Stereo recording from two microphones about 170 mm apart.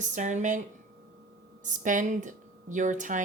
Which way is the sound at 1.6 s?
50° right (ahead or behind).